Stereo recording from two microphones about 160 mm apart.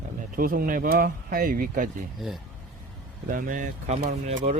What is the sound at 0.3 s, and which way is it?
Speech, 65° right (ahead or behind).